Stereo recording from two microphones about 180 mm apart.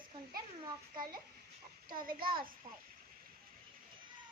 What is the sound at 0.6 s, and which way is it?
Speech, 20° right (ahead or behind).